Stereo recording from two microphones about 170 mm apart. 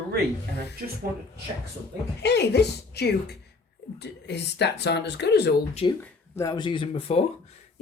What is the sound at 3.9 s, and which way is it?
Speech, 90° left.